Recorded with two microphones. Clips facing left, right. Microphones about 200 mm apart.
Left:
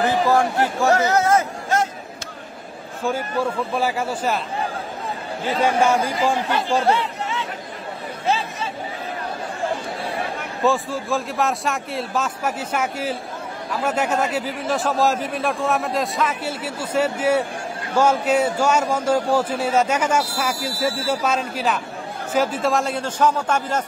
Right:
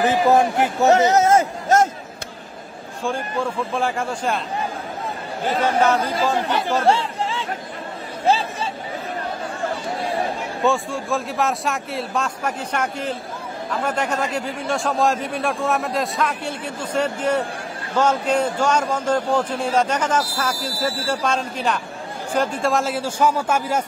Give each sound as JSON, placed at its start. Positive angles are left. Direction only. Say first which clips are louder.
{"t": 0.0, "sound": "speech", "louder": "right 2 dB", "side_deg": -20}
{"t": 1.7, "sound": "a sound", "louder": "right 5 dB", "side_deg": -45}
{"t": 3.7, "sound": "speech", "louder": "left 1 dB", "side_deg": 5}
{"t": 5.6, "sound": "a man's voice", "louder": "left 1 dB", "side_deg": 10}
{"t": 6.9, "sound": "chatter", "louder": "right 2 dB", "side_deg": -30}
{"t": 8.3, "sound": "a sound", "louder": "right 3 dB", "side_deg": -30}
{"t": 10.6, "sound": "a man's voice", "louder": "left 1 dB", "side_deg": 0}